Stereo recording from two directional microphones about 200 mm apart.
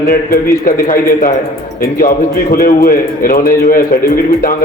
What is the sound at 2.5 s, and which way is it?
A man's voice, 45° left (ahead or behind).